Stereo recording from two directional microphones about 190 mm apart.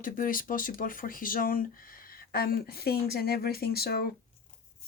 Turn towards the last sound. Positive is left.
turn(degrees=55)  # may be behind; listen again after turning